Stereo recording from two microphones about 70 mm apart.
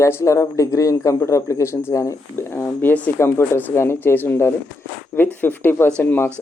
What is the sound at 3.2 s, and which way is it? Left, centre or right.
Speech, left.